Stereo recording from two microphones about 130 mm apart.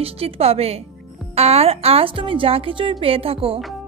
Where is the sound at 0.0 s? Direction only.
50° right (ahead or behind).